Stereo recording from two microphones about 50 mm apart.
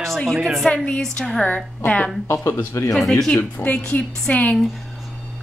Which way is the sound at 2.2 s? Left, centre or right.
Left.